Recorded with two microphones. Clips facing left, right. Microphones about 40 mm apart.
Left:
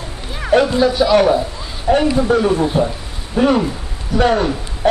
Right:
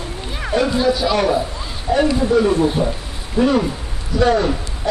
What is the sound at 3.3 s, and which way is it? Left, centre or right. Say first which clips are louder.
Speech: left 2 dB; left.